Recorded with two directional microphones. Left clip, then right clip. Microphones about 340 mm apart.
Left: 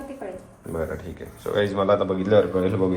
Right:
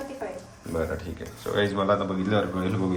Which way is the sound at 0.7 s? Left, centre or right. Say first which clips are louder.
Even; centre.